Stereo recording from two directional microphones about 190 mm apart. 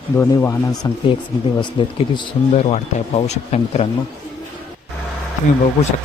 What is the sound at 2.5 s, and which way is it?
Speech, 35° left (ahead or behind).